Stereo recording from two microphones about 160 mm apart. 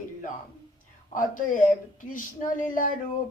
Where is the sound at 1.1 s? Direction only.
55° left (ahead or behind).